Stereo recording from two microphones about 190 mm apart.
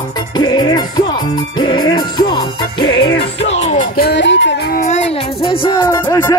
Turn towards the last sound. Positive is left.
turn(degrees=20)  # may be behind; listen again after turning